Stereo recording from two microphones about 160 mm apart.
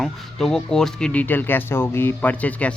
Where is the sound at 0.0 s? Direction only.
5° left (ahead or behind).